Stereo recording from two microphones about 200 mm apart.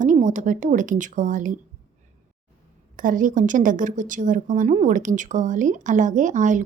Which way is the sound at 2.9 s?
40° right (ahead or behind).